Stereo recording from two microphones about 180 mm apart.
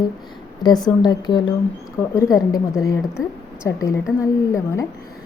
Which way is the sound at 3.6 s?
15° left (ahead or behind).